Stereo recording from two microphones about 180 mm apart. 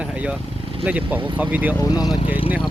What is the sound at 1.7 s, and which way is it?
Speech, 20° left (ahead or behind).